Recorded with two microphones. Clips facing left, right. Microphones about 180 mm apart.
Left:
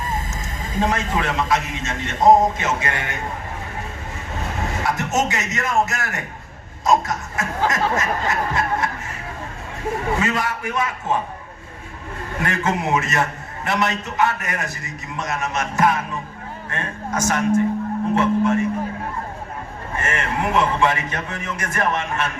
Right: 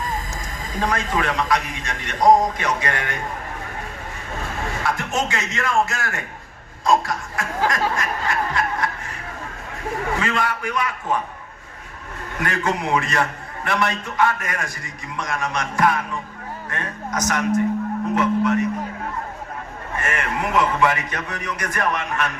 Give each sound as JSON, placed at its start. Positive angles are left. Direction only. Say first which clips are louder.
{"t": 0.6, "sound": "a man's voice", "louder": "left 2 dB", "side_deg": 25}
{"t": 4.8, "sound": "a man's voice", "louder": "left 3 dB", "side_deg": 20}
{"t": 6.8, "sound": "a sound", "louder": "left 1 dB", "side_deg": 20}
{"t": 10.2, "sound": "a man's voice", "louder": "left 1 dB", "side_deg": 25}
{"t": 12.4, "sound": "a man's voice", "louder": "left 1 dB", "side_deg": 25}
{"t": 20.0, "sound": "a man's voice", "louder": "left 1 dB", "side_deg": 25}